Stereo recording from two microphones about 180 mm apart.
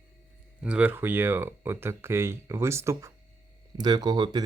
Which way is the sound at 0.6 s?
5° right (ahead or behind).